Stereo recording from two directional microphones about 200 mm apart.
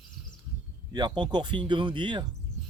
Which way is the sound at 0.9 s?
20° right (ahead or behind).